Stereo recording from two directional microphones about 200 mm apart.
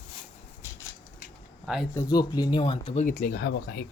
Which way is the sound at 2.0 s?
20° left (ahead or behind).